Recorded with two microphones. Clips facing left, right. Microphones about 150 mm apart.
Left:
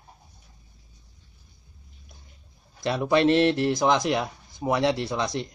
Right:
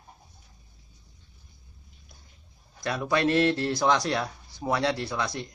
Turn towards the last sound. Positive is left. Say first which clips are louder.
# left 3 dB
turn(degrees=25)  # may be behind; listen again after turning